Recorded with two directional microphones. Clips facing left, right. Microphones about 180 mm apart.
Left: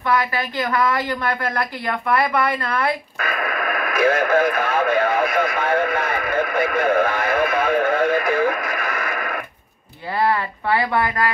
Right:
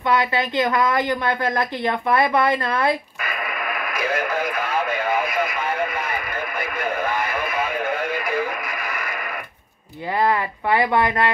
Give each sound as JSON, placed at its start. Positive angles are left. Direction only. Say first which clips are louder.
{"t": 0.1, "sound": "a woman's voice", "louder": "right 1 dB", "side_deg": -20}
{"t": 3.7, "sound": "radio", "louder": "left 7 dB", "side_deg": 55}
{"t": 6.5, "sound": "music", "louder": "left 8 dB", "side_deg": 60}
{"t": 10.2, "sound": "speech", "louder": "left 1 dB", "side_deg": -20}